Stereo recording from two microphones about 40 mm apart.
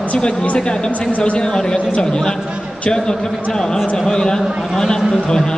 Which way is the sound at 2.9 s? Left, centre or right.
Centre.